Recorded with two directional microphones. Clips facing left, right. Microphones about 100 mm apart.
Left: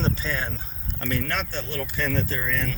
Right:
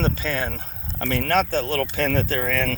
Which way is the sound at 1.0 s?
75° right (ahead or behind).